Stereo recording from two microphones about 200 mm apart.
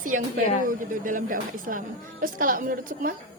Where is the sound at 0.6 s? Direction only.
40° right (ahead or behind).